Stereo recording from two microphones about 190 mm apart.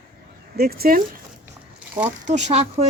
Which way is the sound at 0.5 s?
55° right (ahead or behind).